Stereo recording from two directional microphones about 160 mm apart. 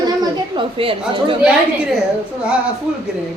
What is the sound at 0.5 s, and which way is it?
Speech, 35° right (ahead or behind).